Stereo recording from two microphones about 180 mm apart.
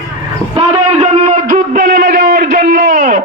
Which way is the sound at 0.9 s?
40° right (ahead or behind).